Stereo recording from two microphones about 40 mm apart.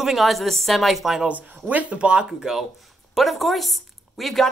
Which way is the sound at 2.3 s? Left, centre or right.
Centre.